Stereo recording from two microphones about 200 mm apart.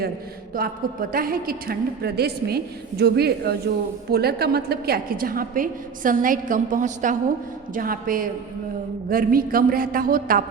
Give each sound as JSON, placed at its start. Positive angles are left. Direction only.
{"t": 1.1, "sound": "a woman's voice", "side_deg": -45}